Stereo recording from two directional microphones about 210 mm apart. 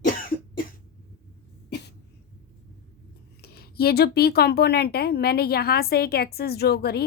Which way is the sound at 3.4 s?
50° left (ahead or behind).